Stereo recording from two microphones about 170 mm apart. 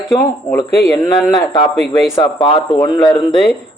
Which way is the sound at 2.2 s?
30° left (ahead or behind).